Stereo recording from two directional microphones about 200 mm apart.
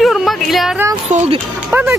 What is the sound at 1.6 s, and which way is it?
Speech, 10° right (ahead or behind).